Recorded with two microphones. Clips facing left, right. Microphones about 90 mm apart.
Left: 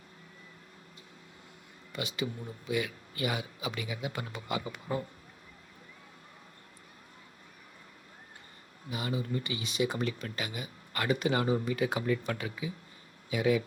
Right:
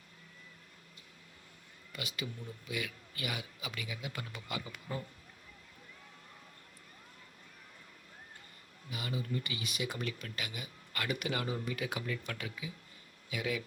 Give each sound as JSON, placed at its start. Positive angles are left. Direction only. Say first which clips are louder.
{"t": 1.9, "sound": "a man's voice", "louder": "left 7 dB", "side_deg": 25}
{"t": 8.9, "sound": "speech", "louder": "left 5 dB", "side_deg": 30}